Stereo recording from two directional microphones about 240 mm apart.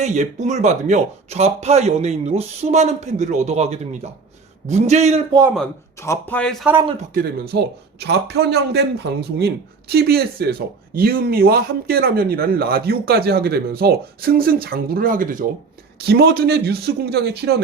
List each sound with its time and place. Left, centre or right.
0.0 s a man's voice: right
5.5 s a man's voice: centre
7.1 s a man's voice: right
9.9 s a man's voice: right